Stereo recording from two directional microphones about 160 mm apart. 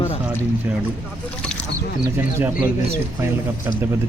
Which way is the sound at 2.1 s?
15° right (ahead or behind).